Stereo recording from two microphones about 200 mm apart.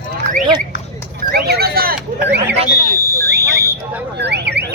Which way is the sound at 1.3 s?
50° right (ahead or behind).